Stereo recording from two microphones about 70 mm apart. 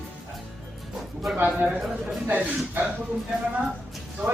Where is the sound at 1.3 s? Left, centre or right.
Right.